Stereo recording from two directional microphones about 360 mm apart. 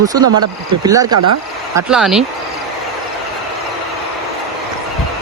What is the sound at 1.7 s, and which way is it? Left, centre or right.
Speech, centre.